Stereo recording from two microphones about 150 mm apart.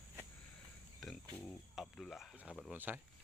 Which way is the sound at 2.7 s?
10° right (ahead or behind).